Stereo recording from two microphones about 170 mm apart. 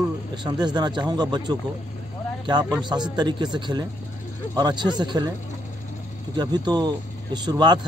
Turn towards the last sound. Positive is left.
turn(degrees=-25)  # may be behind; listen again after turning